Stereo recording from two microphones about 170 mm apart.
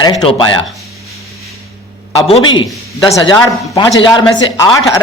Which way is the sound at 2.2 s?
35° left (ahead or behind).